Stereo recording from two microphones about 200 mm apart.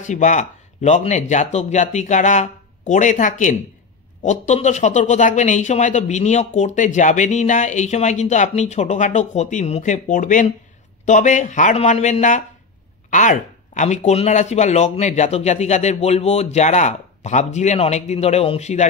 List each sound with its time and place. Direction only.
0.0 s a man's voice: 40° left (ahead or behind)